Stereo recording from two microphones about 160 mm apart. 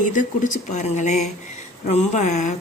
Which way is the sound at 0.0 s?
55° left (ahead or behind).